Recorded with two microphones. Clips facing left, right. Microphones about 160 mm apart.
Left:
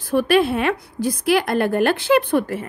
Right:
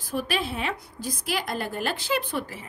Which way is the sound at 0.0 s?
65° left (ahead or behind).